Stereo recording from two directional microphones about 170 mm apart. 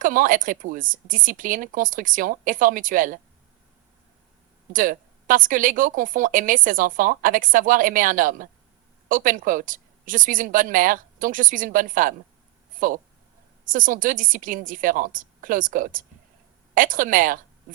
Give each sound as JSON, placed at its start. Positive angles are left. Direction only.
{"t": 0.0, "sound": "a woman's voice", "side_deg": -55}
{"t": 4.7, "sound": "a woman's voice", "side_deg": -50}